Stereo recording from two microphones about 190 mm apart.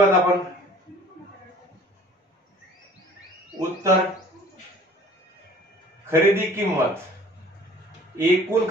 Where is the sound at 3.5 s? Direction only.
Centre (ahead or behind).